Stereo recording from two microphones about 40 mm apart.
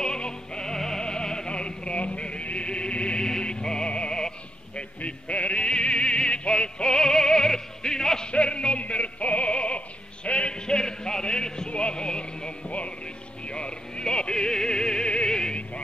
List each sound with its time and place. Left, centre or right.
0.0 s music: centre
4.7 s opera: left; by 8.3 s centre
8.3 s music: left